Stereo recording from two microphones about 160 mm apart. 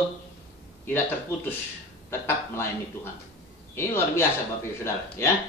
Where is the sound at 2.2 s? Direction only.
15° left (ahead or behind).